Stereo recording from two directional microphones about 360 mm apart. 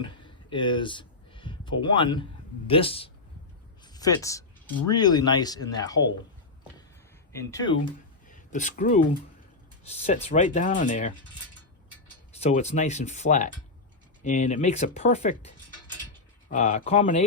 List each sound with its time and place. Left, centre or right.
0.0 s a sound: centre
2.6 s speech: centre
7.3 s speech: centre
8.3 s a sound: centre
9.9 s speech: centre
12.3 s speech: centre
16.5 s speech: centre